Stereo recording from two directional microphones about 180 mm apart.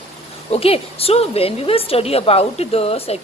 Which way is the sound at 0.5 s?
35° left (ahead or behind).